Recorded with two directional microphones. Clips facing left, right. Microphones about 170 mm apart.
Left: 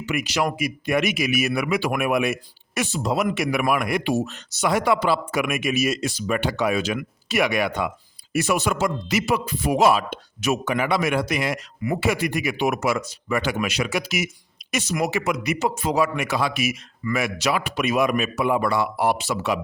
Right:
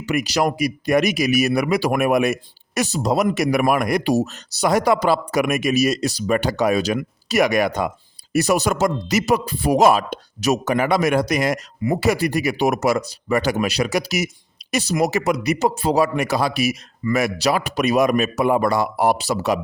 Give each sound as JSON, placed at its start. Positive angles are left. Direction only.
{"t": 0.0, "sound": "speech", "side_deg": -40}